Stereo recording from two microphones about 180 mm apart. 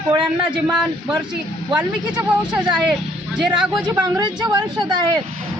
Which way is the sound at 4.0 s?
25° right (ahead or behind).